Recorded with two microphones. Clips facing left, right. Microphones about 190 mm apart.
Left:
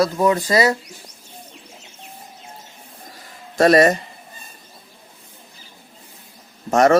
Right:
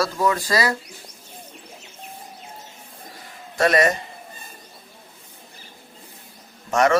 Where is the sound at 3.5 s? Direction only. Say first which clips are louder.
Left 5 dB; 40° left (ahead or behind).